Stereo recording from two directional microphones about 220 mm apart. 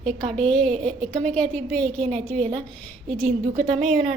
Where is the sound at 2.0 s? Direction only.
30° right (ahead or behind).